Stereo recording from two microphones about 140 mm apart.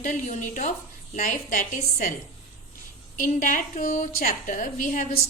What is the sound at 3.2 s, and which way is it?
A woman's voice, 75° left (ahead or behind).